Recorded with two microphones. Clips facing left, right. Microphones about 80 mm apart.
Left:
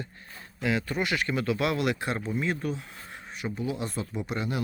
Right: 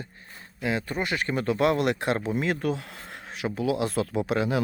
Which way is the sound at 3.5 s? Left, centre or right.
Right.